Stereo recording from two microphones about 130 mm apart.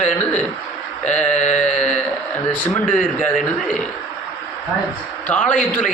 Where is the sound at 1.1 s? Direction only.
10° left (ahead or behind).